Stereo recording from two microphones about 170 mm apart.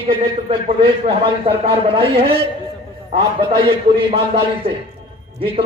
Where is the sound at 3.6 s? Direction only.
30° right (ahead or behind).